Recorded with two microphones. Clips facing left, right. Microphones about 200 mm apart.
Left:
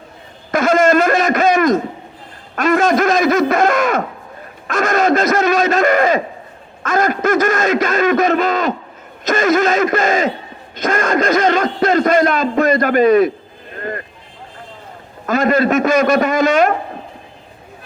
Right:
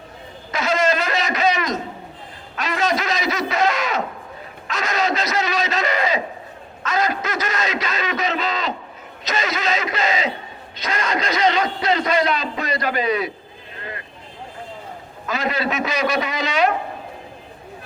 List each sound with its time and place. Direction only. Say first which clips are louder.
0.5 s a sound: left 8 dB; 50° left (ahead or behind)
4.7 s a man's voice: left 8 dB; 50° left (ahead or behind)
13.7 s vehicle: left 9 dB; 50° left (ahead or behind)
15.3 s speech: left 9 dB; 50° left (ahead or behind)